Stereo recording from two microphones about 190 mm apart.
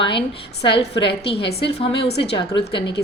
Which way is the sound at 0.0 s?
25° left (ahead or behind).